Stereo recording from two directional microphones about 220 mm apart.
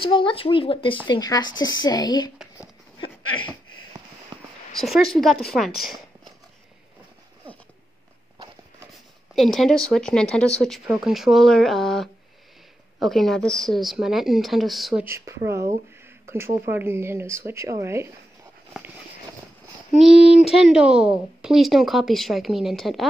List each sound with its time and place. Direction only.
0.0 s a woman's voice: 25° left (ahead or behind)
4.7 s speech: centre (ahead or behind)
9.3 s speech: centre (ahead or behind)
15.0 s speech: 10° right (ahead or behind)
20.0 s speech: centre (ahead or behind)